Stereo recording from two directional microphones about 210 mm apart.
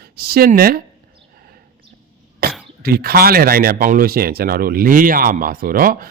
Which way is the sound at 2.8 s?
45° right (ahead or behind).